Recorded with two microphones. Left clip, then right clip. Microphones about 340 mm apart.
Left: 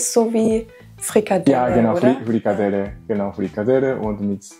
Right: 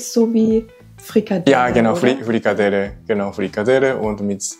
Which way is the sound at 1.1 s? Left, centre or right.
Left.